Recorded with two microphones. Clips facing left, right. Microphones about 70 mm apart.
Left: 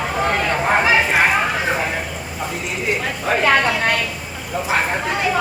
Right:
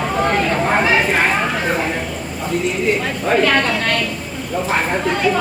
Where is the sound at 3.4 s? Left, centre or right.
Centre.